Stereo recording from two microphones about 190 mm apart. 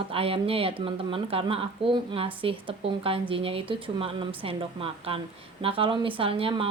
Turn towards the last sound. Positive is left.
turn(degrees=-30)  # may be behind; listen again after turning